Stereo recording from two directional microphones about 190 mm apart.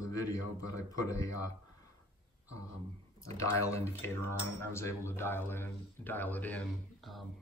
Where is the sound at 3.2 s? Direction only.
15° left (ahead or behind).